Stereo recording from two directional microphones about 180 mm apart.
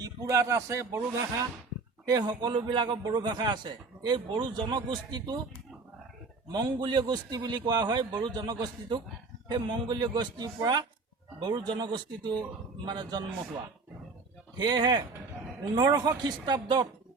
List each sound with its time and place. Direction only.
0.0 s a man's voice: 20° right (ahead or behind)
6.5 s a man's voice: 25° right (ahead or behind)
14.6 s a man's voice: 25° right (ahead or behind)